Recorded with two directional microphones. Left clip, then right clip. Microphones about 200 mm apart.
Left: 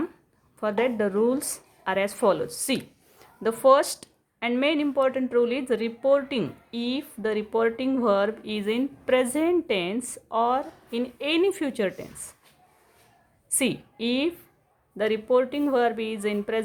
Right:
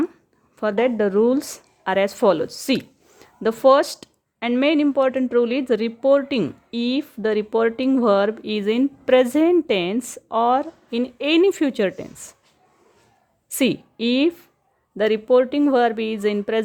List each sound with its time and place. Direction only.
0.6 s a woman's voice: 30° right (ahead or behind)
13.5 s a woman's voice: 30° right (ahead or behind)